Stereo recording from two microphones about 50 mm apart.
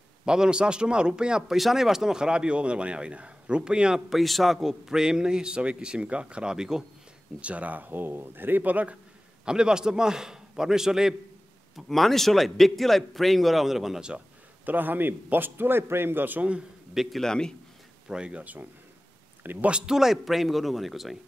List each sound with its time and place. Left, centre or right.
0.2 s a man's voice: centre
4.1 s a man's voice: centre
7.3 s speech: right
9.4 s a man's voice: centre
11.7 s a man's voice: centre
14.6 s a man's voice: right
16.9 s a man's voice: centre
17.2 s a man's voice: centre
18.0 s speech: centre
18.4 s speech: right
19.9 s a man's voice: centre